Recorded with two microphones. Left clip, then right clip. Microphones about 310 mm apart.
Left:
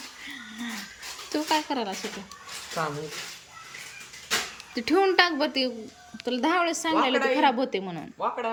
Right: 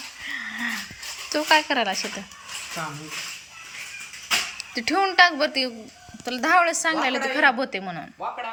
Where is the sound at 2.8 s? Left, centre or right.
Left.